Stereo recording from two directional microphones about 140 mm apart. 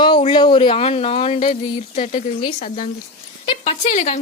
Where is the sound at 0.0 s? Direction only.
40° left (ahead or behind); by 2.9 s 65° left (ahead or behind).